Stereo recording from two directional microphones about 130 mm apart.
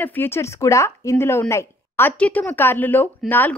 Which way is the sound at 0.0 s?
15° left (ahead or behind).